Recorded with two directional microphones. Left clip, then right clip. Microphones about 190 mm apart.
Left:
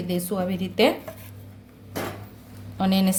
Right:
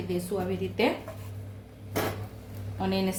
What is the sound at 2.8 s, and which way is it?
Speech, 55° left (ahead or behind).